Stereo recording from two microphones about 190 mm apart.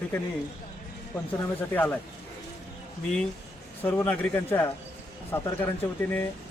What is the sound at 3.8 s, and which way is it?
Speech, 10° left (ahead or behind).